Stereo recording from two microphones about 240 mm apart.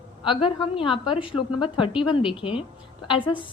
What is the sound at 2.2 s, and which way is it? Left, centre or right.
Speech, centre.